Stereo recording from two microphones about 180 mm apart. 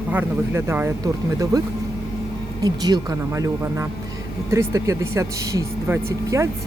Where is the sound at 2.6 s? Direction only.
20° right (ahead or behind).